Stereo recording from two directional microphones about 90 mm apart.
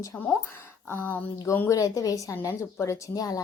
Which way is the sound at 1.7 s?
40° left (ahead or behind).